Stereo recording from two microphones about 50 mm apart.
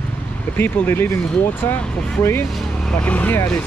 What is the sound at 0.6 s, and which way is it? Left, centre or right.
Speech, left.